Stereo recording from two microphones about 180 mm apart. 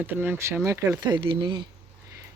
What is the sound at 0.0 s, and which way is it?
Speech, 10° right (ahead or behind).